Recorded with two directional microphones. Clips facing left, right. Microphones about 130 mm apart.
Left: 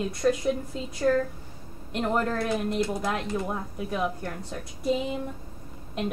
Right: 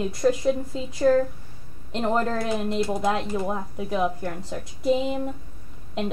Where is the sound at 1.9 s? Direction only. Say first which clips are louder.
Right 2 dB; 25° right (ahead or behind).